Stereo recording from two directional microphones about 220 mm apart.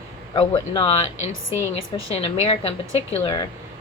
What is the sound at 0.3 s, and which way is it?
Speech, 25° left (ahead or behind).